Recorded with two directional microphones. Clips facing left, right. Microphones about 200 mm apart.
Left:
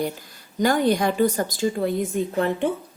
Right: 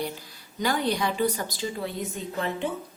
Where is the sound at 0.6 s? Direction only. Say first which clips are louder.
Left 6 dB; 50° left (ahead or behind).